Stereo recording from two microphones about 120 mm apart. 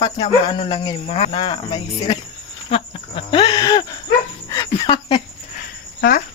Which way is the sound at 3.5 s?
30° left (ahead or behind).